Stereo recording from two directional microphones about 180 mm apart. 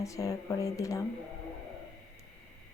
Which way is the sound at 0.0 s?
15° left (ahead or behind).